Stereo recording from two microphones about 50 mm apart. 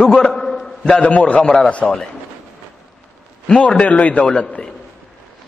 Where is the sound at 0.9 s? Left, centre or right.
Left.